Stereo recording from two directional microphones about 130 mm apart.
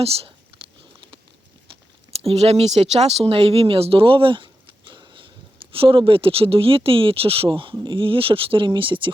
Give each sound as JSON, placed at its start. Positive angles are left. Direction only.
{"t": 0.0, "sound": "speech", "side_deg": -50}
{"t": 2.1, "sound": "speech", "side_deg": -55}
{"t": 4.9, "sound": "a sound", "side_deg": -40}
{"t": 5.7, "sound": "speech", "side_deg": -45}